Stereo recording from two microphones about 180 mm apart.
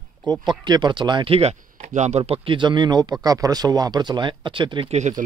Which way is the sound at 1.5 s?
45° right (ahead or behind).